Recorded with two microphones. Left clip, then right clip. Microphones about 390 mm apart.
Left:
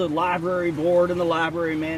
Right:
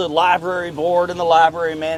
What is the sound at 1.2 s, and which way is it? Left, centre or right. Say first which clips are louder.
Speech: right 10 dB; right.